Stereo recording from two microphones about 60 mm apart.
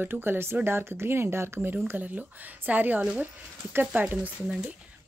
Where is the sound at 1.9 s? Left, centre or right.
Right.